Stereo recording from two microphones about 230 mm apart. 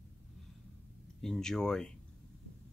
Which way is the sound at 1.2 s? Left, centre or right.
Centre.